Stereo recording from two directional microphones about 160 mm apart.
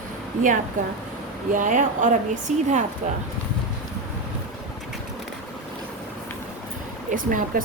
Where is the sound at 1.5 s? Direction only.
55° right (ahead or behind).